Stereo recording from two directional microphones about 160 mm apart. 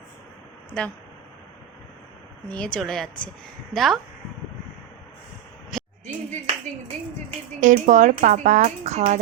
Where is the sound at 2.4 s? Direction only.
10° left (ahead or behind).